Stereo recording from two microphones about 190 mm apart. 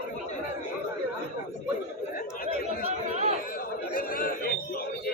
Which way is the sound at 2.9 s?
35° right (ahead or behind).